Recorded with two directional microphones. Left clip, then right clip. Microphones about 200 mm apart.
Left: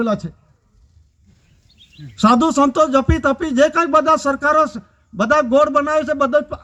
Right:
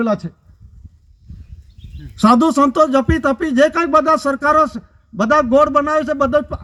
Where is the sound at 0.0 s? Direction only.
35° right (ahead or behind).